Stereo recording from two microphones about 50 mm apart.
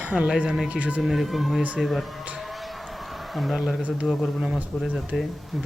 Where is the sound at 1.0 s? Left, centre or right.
Centre.